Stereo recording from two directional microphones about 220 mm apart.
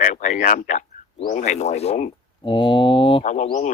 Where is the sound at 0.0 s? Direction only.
35° left (ahead or behind).